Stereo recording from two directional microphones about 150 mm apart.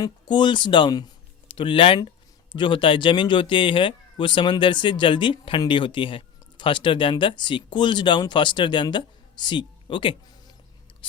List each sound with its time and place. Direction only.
0.0 s speech: 30° left (ahead or behind)